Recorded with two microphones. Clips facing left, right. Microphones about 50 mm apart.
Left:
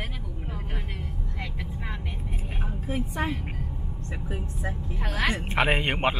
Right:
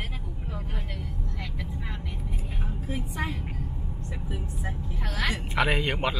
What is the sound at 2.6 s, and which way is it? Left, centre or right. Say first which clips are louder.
A woman's voice: left 4 dB; left.